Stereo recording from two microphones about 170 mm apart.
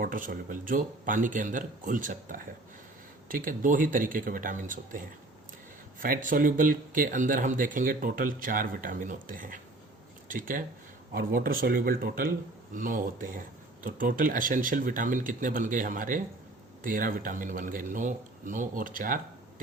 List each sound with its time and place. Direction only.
0.0 s speech: 55° right (ahead or behind)